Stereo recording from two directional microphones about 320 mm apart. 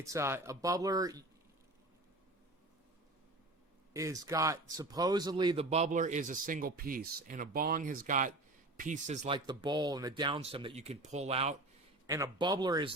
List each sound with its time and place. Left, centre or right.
0.0 s speech: centre
3.9 s a man's voice: centre